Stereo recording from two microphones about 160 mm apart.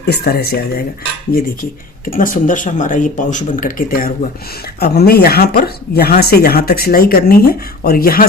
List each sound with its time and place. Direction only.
0.1 s speech: 80° left
2.0 s speech: 60° left (ahead or behind)
4.8 s speech: 75° left (ahead or behind)